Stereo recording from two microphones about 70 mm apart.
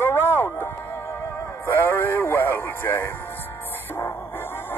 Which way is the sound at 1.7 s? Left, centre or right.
Left.